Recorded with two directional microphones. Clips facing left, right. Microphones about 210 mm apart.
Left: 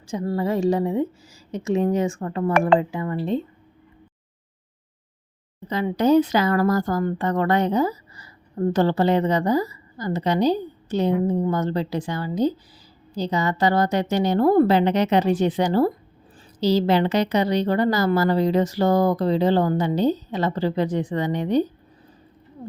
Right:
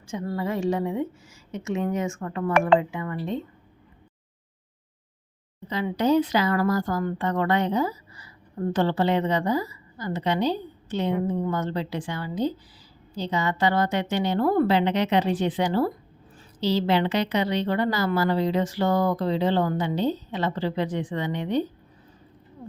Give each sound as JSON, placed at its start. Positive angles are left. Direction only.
{"t": 0.1, "sound": "speech", "side_deg": 35}
{"t": 5.6, "sound": "speech", "side_deg": 45}